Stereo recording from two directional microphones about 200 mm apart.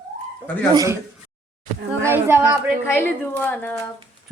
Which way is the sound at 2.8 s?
10° left (ahead or behind).